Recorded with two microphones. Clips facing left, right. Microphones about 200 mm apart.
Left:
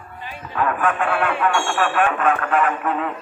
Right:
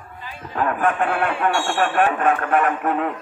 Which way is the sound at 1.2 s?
35° right (ahead or behind).